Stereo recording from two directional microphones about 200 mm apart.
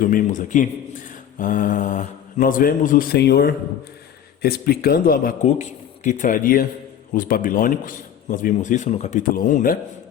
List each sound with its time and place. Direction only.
0.0 s a man's voice: 45° left (ahead or behind)